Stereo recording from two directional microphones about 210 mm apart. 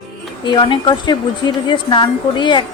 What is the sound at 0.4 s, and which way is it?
Speech, 20° left (ahead or behind).